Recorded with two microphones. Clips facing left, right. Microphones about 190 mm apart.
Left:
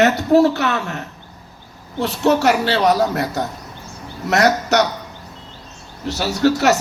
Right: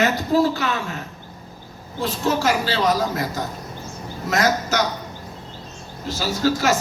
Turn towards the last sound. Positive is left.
turn(degrees=70)  # may be behind; listen again after turning